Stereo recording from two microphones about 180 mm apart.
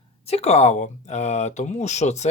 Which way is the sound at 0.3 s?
35° left (ahead or behind).